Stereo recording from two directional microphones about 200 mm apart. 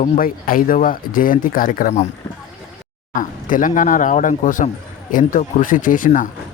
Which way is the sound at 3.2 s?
40° left (ahead or behind).